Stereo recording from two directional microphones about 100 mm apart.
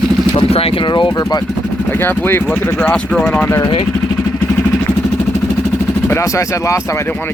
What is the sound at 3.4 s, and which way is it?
Speech, 25° left (ahead or behind).